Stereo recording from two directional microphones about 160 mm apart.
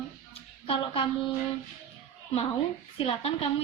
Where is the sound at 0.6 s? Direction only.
35° left (ahead or behind).